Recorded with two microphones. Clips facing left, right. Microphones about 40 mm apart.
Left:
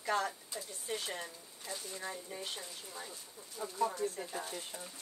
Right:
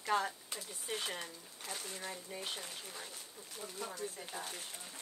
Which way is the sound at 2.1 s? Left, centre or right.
Centre.